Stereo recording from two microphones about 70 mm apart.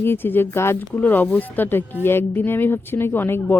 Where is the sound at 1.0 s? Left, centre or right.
Left.